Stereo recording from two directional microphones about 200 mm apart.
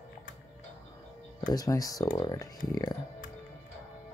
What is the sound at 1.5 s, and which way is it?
Speech, 20° left (ahead or behind).